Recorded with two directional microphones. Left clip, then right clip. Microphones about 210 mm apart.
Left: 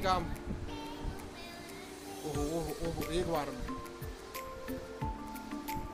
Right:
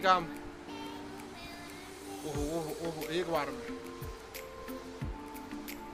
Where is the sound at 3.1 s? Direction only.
20° left (ahead or behind).